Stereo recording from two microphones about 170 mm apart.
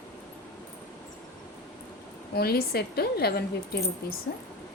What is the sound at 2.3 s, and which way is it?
A woman's voice, 65° left (ahead or behind).